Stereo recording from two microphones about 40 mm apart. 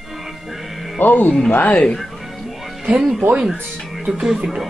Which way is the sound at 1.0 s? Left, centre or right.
Left.